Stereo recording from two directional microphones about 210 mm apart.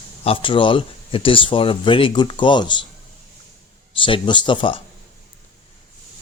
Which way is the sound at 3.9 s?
25° left (ahead or behind).